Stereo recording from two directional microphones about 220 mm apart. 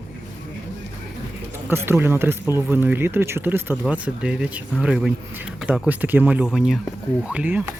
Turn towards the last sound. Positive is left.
turn(degrees=-5)  # may be behind; listen again after turning